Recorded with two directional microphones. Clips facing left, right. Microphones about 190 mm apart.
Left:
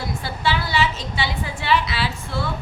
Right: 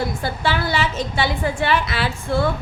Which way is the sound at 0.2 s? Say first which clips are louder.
Right 2 dB; 50° right (ahead or behind).